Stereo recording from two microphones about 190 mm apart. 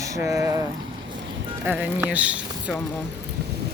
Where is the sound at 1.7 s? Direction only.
10° right (ahead or behind).